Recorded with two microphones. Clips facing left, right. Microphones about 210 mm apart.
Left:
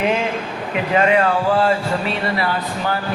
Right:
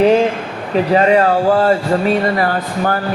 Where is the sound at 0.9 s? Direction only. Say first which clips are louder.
Right 3 dB; 35° right (ahead or behind).